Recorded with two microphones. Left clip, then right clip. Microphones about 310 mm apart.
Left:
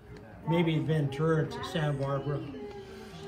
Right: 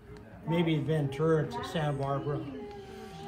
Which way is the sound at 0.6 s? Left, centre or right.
Right.